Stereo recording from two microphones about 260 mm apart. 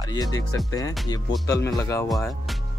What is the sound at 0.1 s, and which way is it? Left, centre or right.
Speech, centre.